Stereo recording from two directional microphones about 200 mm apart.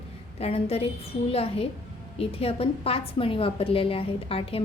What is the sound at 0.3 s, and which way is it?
A woman's voice, 30° left (ahead or behind).